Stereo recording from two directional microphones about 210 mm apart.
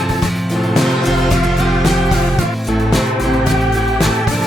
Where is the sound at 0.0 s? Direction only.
Centre (ahead or behind).